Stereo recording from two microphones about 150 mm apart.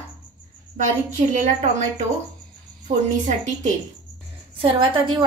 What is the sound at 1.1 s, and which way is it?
Speech, 55° right (ahead or behind).